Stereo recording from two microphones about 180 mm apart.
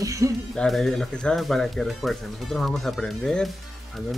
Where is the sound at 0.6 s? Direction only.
Centre (ahead or behind).